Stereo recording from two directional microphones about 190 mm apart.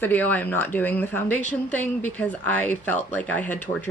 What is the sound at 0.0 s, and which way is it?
Speech, 10° left (ahead or behind).